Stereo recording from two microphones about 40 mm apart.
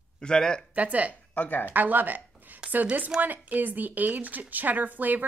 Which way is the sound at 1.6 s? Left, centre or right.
Right.